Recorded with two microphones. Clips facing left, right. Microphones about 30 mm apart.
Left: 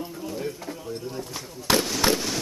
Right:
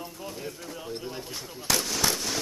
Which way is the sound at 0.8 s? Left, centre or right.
Right.